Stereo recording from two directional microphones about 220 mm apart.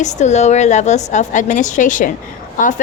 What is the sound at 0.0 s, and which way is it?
A woman's voice, 30° left (ahead or behind).